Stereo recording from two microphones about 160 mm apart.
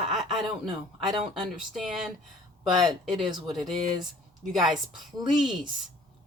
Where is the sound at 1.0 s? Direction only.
25° right (ahead or behind).